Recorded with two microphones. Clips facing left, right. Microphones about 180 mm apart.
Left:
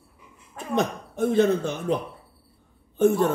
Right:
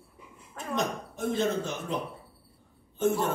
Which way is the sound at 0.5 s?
60° left (ahead or behind).